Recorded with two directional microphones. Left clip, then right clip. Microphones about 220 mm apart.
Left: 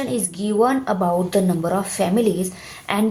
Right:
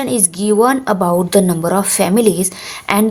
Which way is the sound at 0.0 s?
40° right (ahead or behind).